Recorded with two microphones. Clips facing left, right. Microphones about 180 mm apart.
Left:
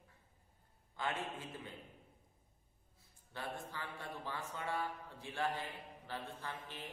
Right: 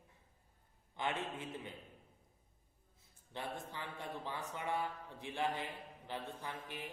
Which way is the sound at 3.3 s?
20° right (ahead or behind).